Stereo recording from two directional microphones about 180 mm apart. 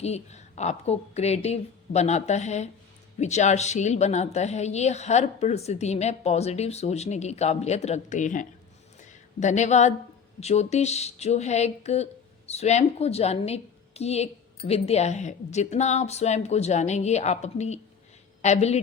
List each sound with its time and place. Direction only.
0.0 s a woman's voice: 35° left (ahead or behind)